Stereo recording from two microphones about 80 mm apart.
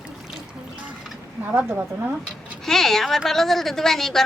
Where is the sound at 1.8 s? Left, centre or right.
Right.